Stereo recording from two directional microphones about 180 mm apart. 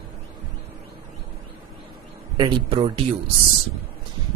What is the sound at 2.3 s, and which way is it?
Speech, 25° right (ahead or behind).